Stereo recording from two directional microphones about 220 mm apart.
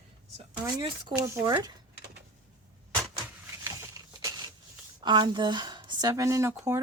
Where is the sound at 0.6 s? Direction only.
20° right (ahead or behind).